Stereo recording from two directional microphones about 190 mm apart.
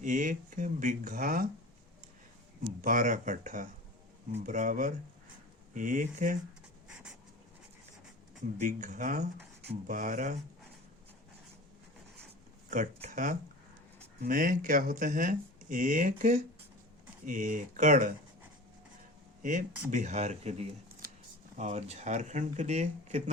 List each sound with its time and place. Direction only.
0.0 s speech: 45° right (ahead or behind)
2.8 s speech: 45° right (ahead or behind)
8.5 s speech: 40° right (ahead or behind)
12.7 s speech: 45° right (ahead or behind)
19.4 s speech: 40° right (ahead or behind)